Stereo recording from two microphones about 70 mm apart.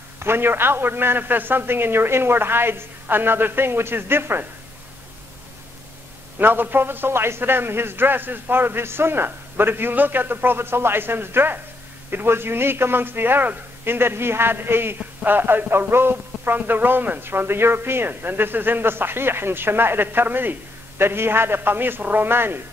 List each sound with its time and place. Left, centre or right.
0.2 s a man's voice: right
6.3 s a man's voice: right